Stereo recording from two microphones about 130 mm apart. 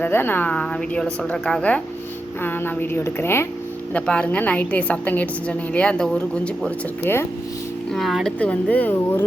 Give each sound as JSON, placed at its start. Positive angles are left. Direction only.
{"t": 0.0, "sound": "a woman's voice", "side_deg": 15}
{"t": 7.9, "sound": "a woman's voice", "side_deg": 0}